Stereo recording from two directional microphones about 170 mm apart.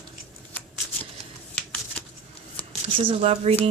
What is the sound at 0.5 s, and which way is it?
Shuffling cards, 10° left (ahead or behind).